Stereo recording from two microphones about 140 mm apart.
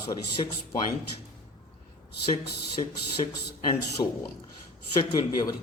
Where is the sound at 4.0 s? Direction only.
30° left (ahead or behind).